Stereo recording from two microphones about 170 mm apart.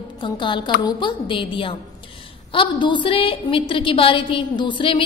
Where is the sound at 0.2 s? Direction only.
30° left (ahead or behind).